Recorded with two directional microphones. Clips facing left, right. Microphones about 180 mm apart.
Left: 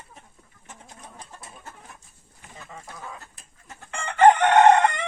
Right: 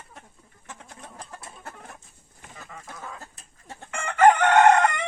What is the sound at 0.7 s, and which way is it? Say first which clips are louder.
Bird: right 2 dB; 65° right (ahead or behind).